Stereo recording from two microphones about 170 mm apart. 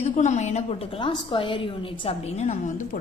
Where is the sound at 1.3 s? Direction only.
30° left (ahead or behind).